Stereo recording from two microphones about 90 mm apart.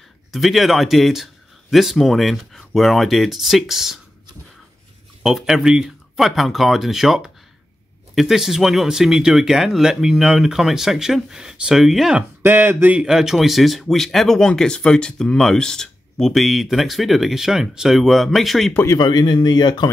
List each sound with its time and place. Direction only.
0.3 s speech: centre (ahead or behind)
5.2 s speech: 5° right (ahead or behind)
12.2 s speech: 20° right (ahead or behind)
13.0 s speech: 5° right (ahead or behind)
18.9 s speech: 55° left (ahead or behind)